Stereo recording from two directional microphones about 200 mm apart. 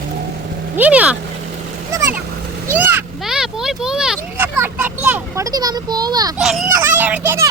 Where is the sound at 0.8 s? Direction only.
5° right (ahead or behind).